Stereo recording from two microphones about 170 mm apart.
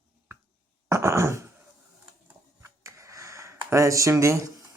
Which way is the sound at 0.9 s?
15° right (ahead or behind).